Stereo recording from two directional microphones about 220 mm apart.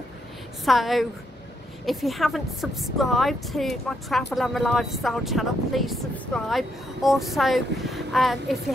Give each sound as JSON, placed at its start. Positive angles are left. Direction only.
{"t": 0.7, "sound": "a woman's voice", "side_deg": 0}